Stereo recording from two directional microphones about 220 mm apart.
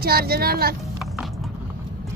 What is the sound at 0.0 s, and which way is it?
Speech, 45° right (ahead or behind).